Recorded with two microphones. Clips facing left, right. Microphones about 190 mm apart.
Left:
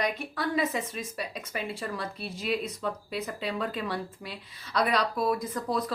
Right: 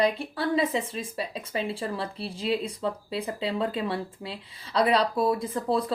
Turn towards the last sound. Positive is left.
turn(degrees=-30)  # may be behind; listen again after turning